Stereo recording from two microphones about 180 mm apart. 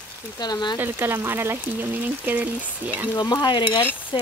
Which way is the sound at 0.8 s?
10° right (ahead or behind).